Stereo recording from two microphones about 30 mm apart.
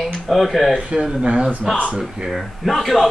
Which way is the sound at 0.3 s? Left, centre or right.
Centre.